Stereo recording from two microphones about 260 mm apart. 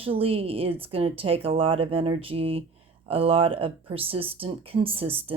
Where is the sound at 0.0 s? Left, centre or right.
Right.